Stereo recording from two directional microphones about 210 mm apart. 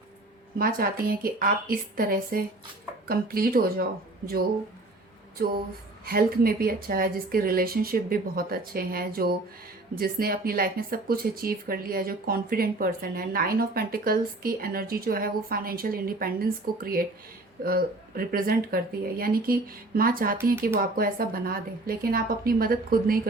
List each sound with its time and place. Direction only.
0.6 s speech: 45° right (ahead or behind)
6.1 s speech: 45° right (ahead or behind)